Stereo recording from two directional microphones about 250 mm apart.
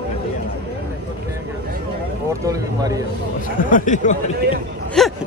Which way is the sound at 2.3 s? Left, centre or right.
Centre.